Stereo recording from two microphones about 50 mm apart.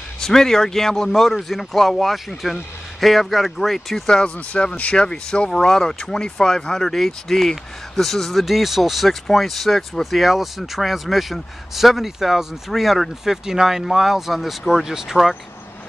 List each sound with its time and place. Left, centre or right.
0.2 s speech: centre
4.1 s speech: centre